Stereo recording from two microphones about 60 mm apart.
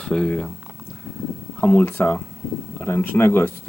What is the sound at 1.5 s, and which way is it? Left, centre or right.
Speech, left.